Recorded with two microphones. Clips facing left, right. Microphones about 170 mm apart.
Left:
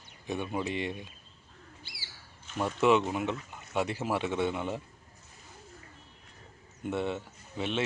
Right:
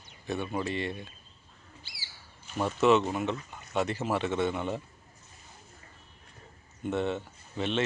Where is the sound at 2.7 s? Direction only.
10° left (ahead or behind).